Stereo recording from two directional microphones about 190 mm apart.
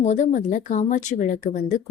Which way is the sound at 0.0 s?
35° left (ahead or behind).